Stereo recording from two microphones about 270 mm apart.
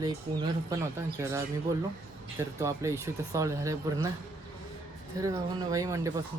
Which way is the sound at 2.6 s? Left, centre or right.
Centre.